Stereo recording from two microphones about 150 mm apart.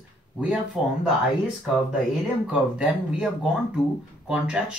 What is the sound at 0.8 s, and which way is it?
Speech, 5° right (ahead or behind).